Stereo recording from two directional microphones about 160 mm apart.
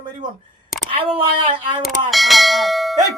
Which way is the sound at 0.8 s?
35° right (ahead or behind).